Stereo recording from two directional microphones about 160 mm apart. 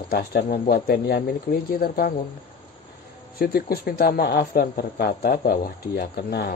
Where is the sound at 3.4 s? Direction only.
75° left (ahead or behind).